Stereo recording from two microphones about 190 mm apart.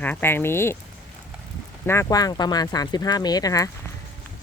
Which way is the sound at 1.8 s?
15° left (ahead or behind).